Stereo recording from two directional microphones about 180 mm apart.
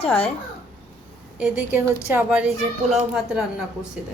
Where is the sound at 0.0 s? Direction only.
30° left (ahead or behind).